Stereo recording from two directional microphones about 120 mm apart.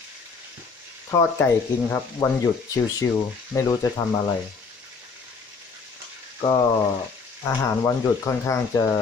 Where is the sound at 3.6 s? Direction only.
25° left (ahead or behind).